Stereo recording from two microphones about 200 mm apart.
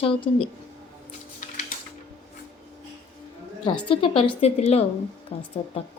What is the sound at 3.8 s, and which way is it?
A woman's voice, 25° left (ahead or behind).